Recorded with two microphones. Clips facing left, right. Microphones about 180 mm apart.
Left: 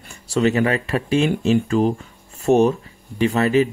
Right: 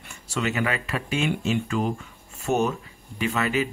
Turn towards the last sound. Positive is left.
turn(degrees=35)  # may be behind; listen again after turning